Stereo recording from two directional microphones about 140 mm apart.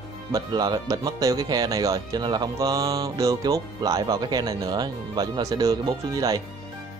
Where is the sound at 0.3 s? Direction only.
30° right (ahead or behind).